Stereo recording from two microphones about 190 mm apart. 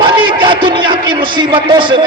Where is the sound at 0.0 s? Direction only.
25° right (ahead or behind).